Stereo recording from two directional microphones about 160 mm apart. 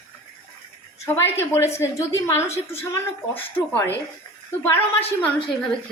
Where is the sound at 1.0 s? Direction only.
15° left (ahead or behind).